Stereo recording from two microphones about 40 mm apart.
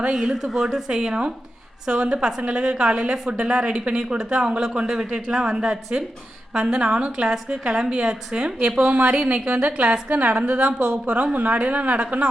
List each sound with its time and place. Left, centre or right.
0.0 s a woman's voice: centre
8.9 s a woman's voice: right